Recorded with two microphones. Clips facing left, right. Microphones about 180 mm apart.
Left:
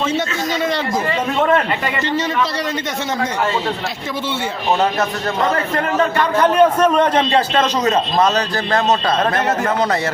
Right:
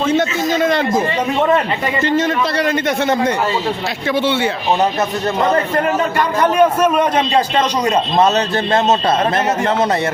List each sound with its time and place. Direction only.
0.2 s a man's voice: 50° right (ahead or behind)
2.1 s a man's voice: 55° right (ahead or behind)
5.4 s a man's voice: 20° right (ahead or behind)